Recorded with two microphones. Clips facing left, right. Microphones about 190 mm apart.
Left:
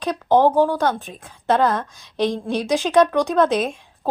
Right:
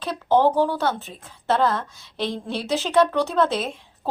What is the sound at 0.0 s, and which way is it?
Speech, 15° left (ahead or behind).